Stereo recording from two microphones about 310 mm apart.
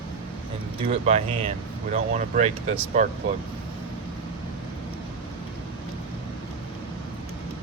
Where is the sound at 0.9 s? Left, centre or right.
Centre.